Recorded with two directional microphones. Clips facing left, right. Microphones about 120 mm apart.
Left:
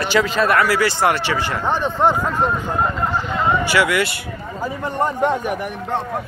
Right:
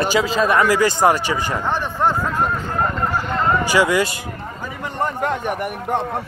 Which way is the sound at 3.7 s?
20° right (ahead or behind).